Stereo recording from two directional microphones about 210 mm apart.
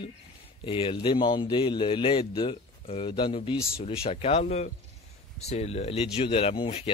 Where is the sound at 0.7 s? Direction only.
25° left (ahead or behind).